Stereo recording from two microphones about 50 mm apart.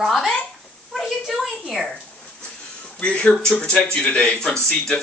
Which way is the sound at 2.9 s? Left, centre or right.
Left.